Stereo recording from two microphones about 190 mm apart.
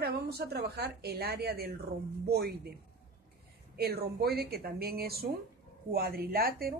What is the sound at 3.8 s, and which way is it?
A woman's voice, 55° right (ahead or behind).